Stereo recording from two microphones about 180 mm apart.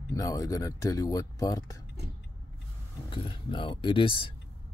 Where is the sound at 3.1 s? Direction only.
30° left (ahead or behind).